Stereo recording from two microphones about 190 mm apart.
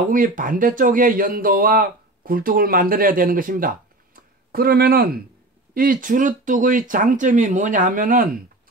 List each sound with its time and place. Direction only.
0.1 s speech: 45° right (ahead or behind)